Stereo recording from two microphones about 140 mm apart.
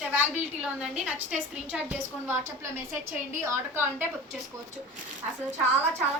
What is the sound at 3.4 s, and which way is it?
Speech, 15° right (ahead or behind).